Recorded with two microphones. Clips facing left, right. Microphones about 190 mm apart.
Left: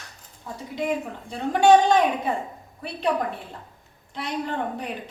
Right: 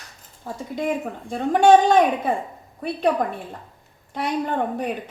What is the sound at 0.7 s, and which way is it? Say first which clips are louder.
Speech: right 1 dB; 50° right (ahead or behind).